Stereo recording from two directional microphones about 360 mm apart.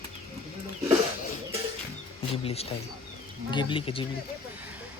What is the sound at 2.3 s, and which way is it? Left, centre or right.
Speech, centre.